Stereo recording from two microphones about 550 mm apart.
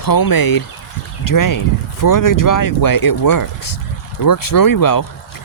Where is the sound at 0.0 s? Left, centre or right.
Left.